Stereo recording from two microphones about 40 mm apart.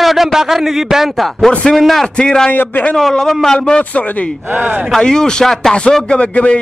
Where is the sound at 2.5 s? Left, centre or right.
Left.